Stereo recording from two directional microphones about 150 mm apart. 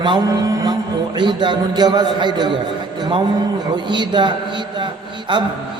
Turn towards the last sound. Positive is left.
turn(degrees=-30)  # may be behind; listen again after turning